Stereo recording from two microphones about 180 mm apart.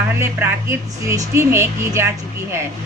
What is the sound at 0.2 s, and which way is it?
A woman's voice, 10° right (ahead or behind).